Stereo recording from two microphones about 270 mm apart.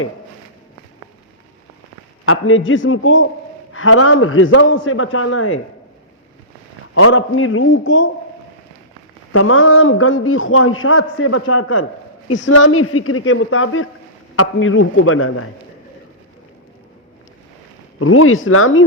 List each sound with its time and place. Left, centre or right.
2.2 s a man's voice: left
6.9 s a man's voice: left
9.3 s a man's voice: left
18.0 s a man's voice: left